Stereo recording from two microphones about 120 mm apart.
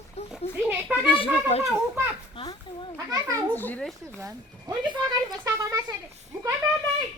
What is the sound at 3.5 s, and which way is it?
Speech, 15° left (ahead or behind).